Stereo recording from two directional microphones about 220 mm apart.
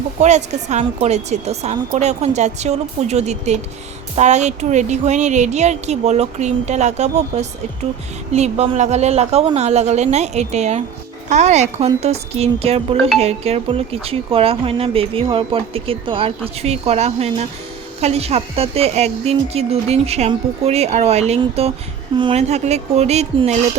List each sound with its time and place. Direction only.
0.2 s a woman's voice: 30° right (ahead or behind)